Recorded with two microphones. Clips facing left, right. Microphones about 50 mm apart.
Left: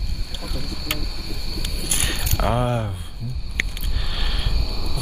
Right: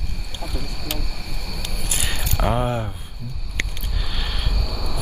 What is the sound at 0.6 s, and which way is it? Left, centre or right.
Speech, right.